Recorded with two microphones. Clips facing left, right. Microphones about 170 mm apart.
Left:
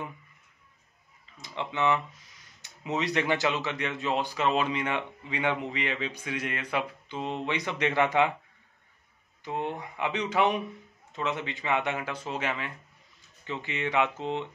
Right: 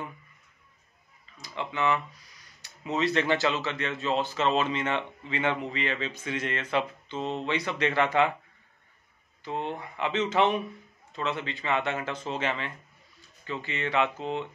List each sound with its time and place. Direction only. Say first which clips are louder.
1.6 s speech: left 1 dB; 20° left (ahead or behind)
9.4 s speech: even; 15° left (ahead or behind)